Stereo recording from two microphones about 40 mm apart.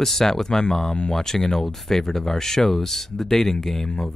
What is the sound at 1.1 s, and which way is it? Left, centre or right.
Speech, centre.